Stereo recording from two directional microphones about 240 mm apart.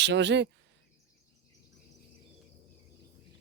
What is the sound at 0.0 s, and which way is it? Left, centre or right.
Speech, right.